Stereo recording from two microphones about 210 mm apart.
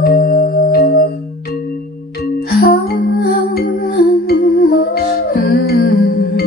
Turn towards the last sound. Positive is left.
turn(degrees=45)  # may be behind; listen again after turning